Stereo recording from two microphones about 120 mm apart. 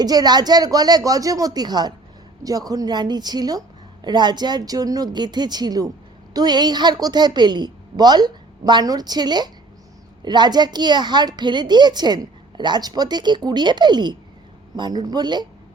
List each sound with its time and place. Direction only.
0.0 s a child's voice: 35° right (ahead or behind)